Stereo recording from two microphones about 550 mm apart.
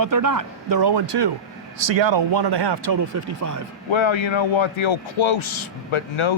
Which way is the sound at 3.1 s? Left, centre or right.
Right.